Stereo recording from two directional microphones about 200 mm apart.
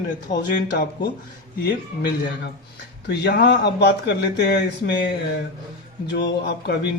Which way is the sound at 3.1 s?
55° left (ahead or behind).